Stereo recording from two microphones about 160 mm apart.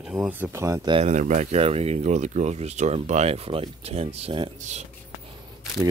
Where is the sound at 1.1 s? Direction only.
50° right (ahead or behind).